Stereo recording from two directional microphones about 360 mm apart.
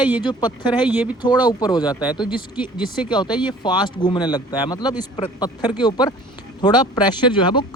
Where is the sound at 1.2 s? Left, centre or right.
Centre.